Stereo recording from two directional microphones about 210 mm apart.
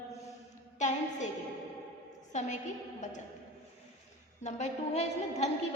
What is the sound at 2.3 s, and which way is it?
Speech, 35° left (ahead or behind).